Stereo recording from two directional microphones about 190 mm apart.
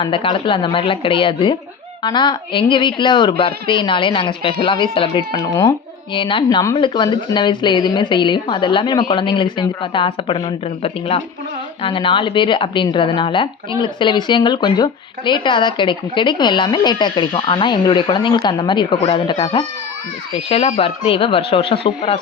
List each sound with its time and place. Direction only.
0.0 s speech: 25° left (ahead or behind)